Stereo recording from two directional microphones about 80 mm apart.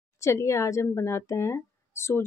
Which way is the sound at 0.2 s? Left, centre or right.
Left.